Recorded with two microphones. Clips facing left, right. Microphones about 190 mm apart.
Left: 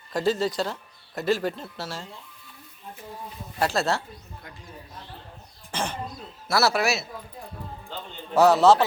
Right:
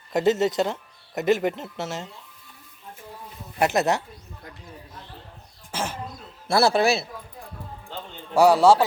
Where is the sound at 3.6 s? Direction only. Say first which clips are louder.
Right 3 dB; 20° right (ahead or behind).